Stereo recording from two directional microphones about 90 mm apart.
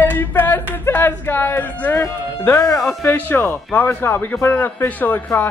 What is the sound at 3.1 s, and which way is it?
Speech, 25° left (ahead or behind).